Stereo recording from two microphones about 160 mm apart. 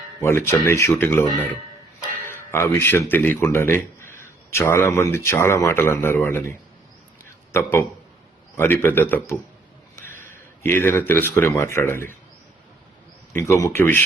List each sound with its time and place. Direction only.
0.2 s a man's voice: 15° left (ahead or behind)
13.3 s a man's voice: 20° left (ahead or behind)